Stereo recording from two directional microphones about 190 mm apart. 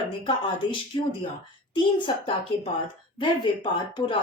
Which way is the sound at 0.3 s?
25° left (ahead or behind).